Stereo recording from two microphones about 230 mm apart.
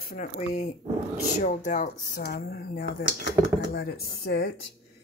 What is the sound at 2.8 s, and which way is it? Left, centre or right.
Speech, left.